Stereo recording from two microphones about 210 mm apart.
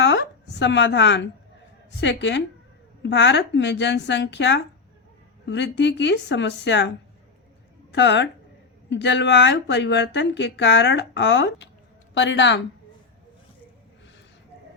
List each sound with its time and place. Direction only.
0.0 s a sound: 55° left (ahead or behind)
2.0 s speech: 55° left (ahead or behind)
7.9 s speech: 55° left (ahead or behind)